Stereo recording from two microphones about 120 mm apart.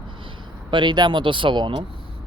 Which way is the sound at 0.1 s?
45° right (ahead or behind).